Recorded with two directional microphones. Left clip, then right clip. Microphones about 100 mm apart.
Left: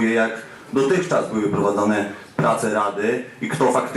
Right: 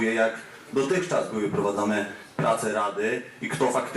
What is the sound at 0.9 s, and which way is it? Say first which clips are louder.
Speech: left 6 dB; 15° right (ahead or behind).